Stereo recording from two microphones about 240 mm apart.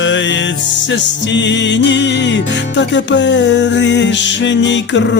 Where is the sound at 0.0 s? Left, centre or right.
Left.